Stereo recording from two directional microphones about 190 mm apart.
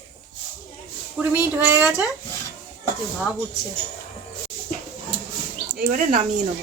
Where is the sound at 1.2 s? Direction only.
10° right (ahead or behind).